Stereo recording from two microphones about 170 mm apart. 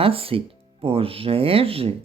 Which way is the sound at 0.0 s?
35° right (ahead or behind).